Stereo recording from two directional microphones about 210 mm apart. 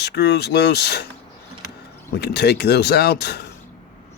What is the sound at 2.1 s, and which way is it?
Speech, 50° left (ahead or behind).